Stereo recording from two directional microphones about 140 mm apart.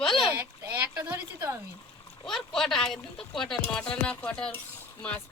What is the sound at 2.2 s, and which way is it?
Speech, 5° left (ahead or behind).